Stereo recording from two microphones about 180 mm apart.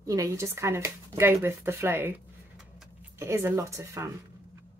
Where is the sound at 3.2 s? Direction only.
15° right (ahead or behind).